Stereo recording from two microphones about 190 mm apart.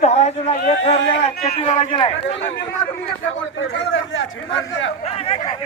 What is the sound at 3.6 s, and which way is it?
Speech, 80° left.